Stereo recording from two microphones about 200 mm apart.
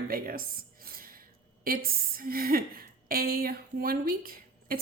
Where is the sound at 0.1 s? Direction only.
45° right (ahead or behind).